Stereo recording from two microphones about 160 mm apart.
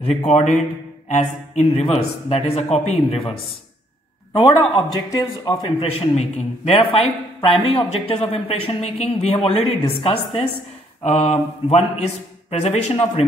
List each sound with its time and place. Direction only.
0.1 s a man's voice: 45° left (ahead or behind); by 5.7 s 25° left (ahead or behind)
5.8 s speech: 40° left (ahead or behind)